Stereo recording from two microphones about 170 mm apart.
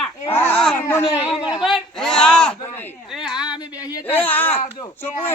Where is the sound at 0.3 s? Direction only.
10° left (ahead or behind).